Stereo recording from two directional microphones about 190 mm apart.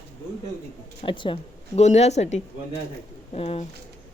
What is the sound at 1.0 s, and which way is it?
Speech, 25° left (ahead or behind).